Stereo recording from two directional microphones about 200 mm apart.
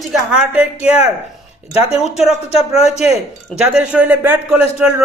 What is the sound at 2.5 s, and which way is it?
Speech, 30° left (ahead or behind).